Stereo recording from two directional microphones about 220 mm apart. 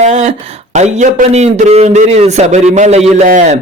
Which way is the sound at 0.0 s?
30° right (ahead or behind).